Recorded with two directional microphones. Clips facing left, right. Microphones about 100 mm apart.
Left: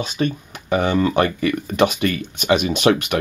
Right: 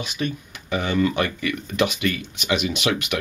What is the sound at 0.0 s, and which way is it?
Speech, 40° left (ahead or behind).